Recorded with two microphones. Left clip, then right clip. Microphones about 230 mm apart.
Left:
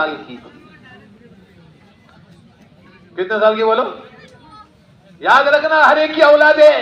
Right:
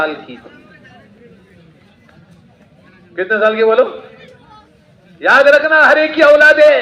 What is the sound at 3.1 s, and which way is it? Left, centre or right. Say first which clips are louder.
Speech: right 1 dB; left.